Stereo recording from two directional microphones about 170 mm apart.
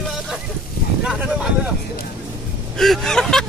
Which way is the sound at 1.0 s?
5° right (ahead or behind).